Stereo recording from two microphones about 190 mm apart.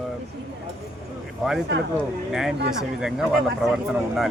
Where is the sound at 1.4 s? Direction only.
Centre (ahead or behind).